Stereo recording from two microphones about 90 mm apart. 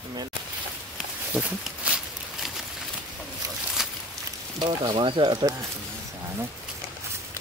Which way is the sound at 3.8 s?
5° right (ahead or behind).